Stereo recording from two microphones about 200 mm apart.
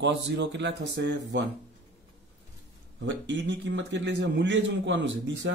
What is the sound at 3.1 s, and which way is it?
A man's voice, 65° right (ahead or behind).